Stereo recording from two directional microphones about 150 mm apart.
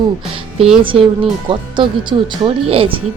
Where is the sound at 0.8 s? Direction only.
35° right (ahead or behind).